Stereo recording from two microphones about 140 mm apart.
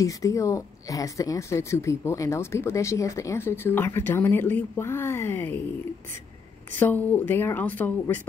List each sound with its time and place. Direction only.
0.0 s a woman's voice: 25° left (ahead or behind)
6.8 s speech: 15° left (ahead or behind)